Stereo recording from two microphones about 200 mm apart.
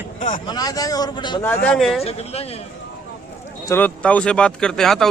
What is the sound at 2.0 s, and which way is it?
Speech, 30° left (ahead or behind).